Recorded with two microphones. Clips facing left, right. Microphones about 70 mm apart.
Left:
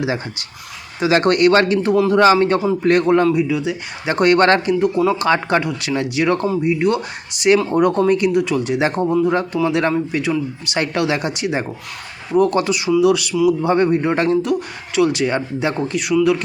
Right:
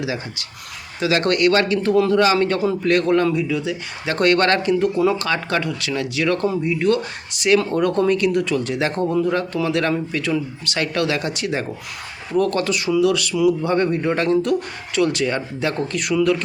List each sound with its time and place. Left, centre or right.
0.9 s speech: left
4.7 s a man's voice: centre
5.2 s speech: left
16.0 s a man's voice: centre